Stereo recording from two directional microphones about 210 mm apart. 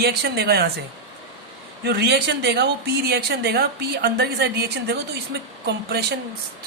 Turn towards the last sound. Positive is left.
turn(degrees=-50)  # may be behind; listen again after turning